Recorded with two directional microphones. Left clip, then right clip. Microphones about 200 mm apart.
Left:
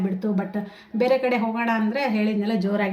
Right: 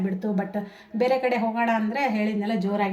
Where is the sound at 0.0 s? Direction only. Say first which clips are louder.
Left 1 dB; centre (ahead or behind).